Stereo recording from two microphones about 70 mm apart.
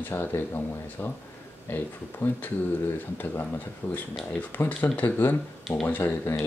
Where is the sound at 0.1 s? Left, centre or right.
Left.